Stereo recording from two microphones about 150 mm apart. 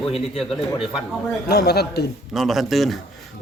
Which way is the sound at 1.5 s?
90° left.